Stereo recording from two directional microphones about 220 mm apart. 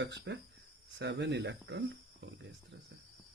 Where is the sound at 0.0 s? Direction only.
50° right (ahead or behind).